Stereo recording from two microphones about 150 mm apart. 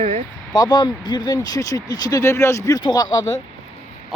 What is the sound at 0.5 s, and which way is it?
Speech, 30° left (ahead or behind).